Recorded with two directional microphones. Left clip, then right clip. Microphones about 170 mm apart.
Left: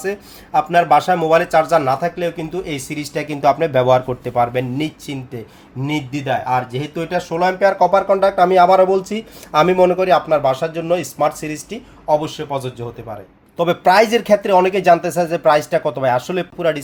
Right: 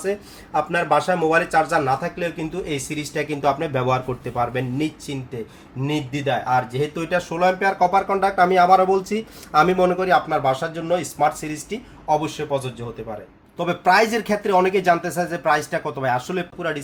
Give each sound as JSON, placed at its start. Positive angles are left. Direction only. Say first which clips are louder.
{"t": 0.0, "sound": "speech", "louder": "left 1 dB", "side_deg": 55}
{"t": 13.6, "sound": "speech", "louder": "left 5 dB", "side_deg": 50}